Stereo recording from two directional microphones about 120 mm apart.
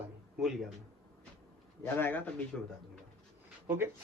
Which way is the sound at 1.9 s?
15° left (ahead or behind).